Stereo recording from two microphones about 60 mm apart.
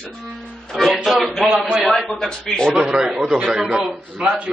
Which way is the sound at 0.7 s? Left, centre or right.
Centre.